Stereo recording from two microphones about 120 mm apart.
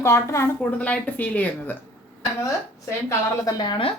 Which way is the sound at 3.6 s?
40° left (ahead or behind).